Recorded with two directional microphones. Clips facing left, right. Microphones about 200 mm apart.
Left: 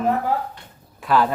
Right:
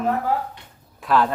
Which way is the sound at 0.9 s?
Centre (ahead or behind).